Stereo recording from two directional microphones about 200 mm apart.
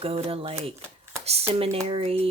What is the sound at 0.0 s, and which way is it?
Speech, 30° right (ahead or behind).